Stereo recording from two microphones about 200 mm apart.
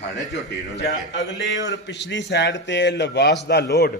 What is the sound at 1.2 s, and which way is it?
A man's voice, 65° left (ahead or behind).